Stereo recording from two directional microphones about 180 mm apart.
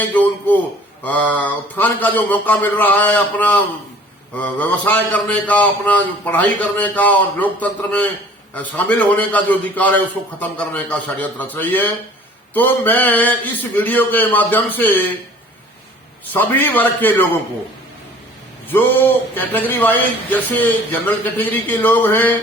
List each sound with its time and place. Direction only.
0.0 s a man's voice: 10° left (ahead or behind)
16.3 s a man's voice: 10° left (ahead or behind)
18.7 s a man's voice: 10° left (ahead or behind)